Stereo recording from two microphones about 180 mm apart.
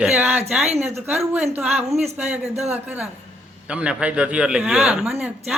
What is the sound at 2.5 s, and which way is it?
Speech, 35° right (ahead or behind).